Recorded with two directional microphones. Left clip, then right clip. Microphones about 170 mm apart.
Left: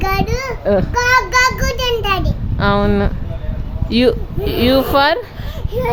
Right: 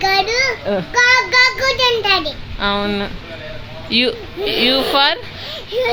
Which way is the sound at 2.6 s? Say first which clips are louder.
Left 3 dB; 45° left (ahead or behind).